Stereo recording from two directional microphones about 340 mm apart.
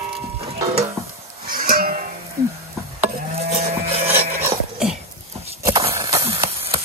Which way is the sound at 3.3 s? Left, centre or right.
Centre.